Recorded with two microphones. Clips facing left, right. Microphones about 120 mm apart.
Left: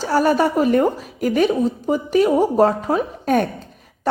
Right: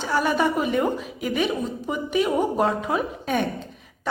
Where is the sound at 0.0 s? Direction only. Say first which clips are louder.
Left 5 dB; 40° left (ahead or behind).